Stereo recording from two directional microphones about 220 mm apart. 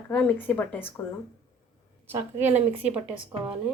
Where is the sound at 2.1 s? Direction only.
10° right (ahead or behind).